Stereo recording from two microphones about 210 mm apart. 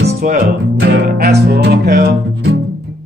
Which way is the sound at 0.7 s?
50° right (ahead or behind).